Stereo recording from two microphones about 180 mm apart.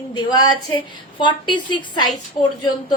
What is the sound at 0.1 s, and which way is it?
A woman's voice, 25° left (ahead or behind).